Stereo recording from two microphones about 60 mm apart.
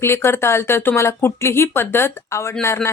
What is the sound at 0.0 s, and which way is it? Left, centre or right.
Speech, left.